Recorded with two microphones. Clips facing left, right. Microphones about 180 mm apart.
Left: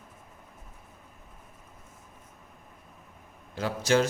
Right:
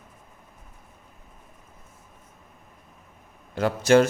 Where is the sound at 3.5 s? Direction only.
60° right (ahead or behind).